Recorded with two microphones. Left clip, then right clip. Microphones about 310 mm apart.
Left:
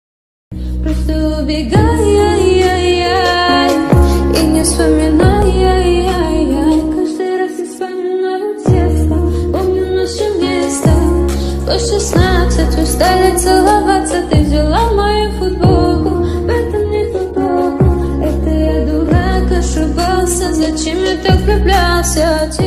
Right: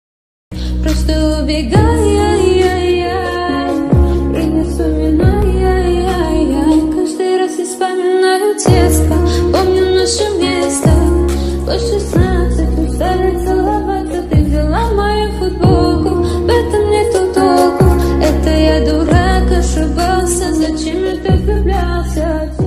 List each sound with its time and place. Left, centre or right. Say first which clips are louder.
1.2 s music: even; centre; by 3.7 s left
3.9 s music: left 3 dB; left
5.1 s music: left 3 dB; left
5.7 s music: left 2 dB; centre
8.6 s music: right 1 dB; right
10.4 s music: right 1 dB; centre
12.1 s music: left 3 dB; centre
13.0 s music: left 5 dB; left
14.7 s music: left 2 dB; centre
17.4 s music: right 3 dB; right
18.6 s music: right 3 dB; right
20.0 s music: even; centre
21.0 s music: left 3 dB; left